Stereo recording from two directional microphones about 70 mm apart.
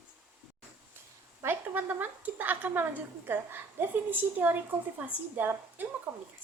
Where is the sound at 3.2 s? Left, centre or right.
Right.